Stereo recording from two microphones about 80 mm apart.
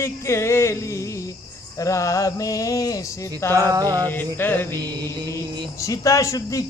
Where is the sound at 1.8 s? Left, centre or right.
Left.